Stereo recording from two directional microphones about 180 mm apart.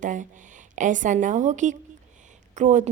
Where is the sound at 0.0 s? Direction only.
45° right (ahead or behind).